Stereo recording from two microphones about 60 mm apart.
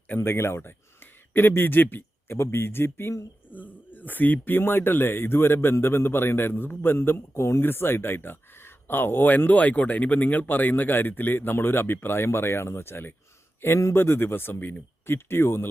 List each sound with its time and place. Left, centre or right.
0.2 s speech: left
3.5 s a man's voice: left
13.6 s a man's voice: left